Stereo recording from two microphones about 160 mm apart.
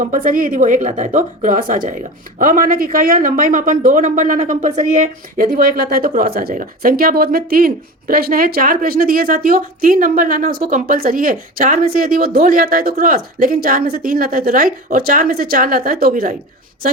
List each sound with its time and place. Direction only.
0.0 s a woman's voice: 55° right (ahead or behind)